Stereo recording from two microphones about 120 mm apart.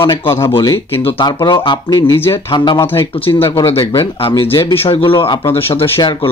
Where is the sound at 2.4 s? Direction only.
40° left (ahead or behind).